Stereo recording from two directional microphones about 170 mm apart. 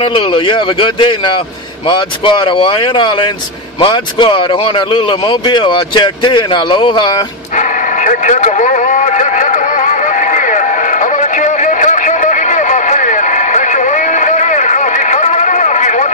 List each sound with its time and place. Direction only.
0.0 s speech: 30° left (ahead or behind)
7.5 s vehicle: 50° left (ahead or behind)